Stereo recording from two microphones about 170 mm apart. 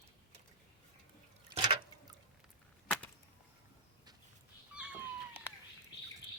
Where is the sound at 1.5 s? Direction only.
30° right (ahead or behind).